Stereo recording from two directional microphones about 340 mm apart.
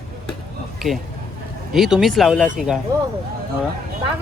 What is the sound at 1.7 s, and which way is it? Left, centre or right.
Speech, centre.